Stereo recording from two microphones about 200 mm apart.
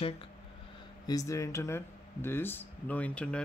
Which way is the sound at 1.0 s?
15° left (ahead or behind).